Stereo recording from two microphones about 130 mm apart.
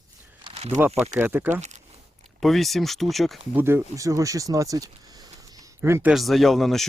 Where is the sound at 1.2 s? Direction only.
15° right (ahead or behind).